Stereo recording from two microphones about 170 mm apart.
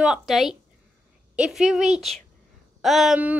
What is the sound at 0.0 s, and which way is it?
A woman's voice, centre (ahead or behind).